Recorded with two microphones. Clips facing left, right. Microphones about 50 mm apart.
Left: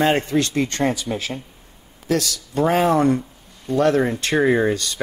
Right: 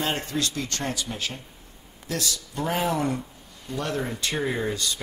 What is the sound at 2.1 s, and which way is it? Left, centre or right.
Speech, left.